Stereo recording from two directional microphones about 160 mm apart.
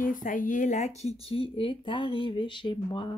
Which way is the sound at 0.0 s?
55° left (ahead or behind).